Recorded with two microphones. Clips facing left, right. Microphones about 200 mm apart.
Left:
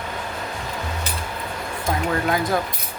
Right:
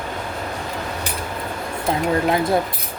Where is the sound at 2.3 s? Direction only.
25° right (ahead or behind).